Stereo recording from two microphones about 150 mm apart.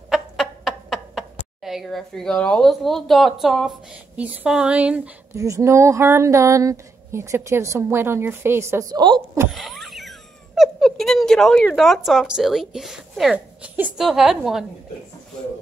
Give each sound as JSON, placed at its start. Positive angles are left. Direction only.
{"t": 0.1, "sound": "a sound", "side_deg": 0}
{"t": 4.2, "sound": "speech", "side_deg": -5}
{"t": 5.3, "sound": "speech", "side_deg": -20}
{"t": 9.5, "sound": "speech", "side_deg": 0}